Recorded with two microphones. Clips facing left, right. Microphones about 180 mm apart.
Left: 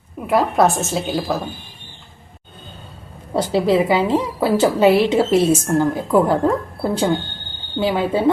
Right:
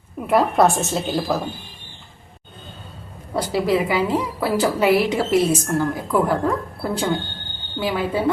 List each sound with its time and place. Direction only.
0.2 s a woman's voice: centre (ahead or behind)
3.3 s a woman's voice: 25° left (ahead or behind)
7.8 s a woman's voice: 25° left (ahead or behind)